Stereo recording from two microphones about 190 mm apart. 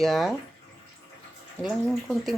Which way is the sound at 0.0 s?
Centre (ahead or behind).